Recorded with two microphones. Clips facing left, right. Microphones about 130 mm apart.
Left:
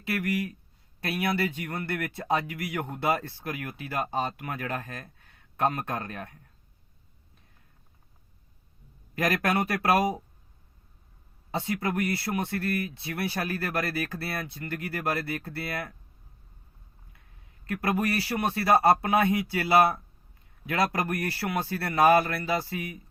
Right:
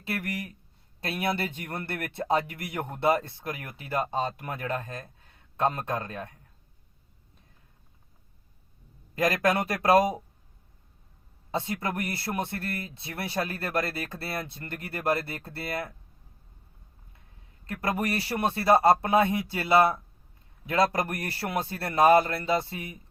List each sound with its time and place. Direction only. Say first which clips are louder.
0.1 s speech: left 4 dB; 25° right (ahead or behind)
9.1 s speech: right 1 dB; 20° right (ahead or behind)
11.5 s speech: left 1 dB; 25° right (ahead or behind)
17.9 s speech: left 1 dB; 25° right (ahead or behind)
20.7 s speech: right 2 dB; 25° right (ahead or behind)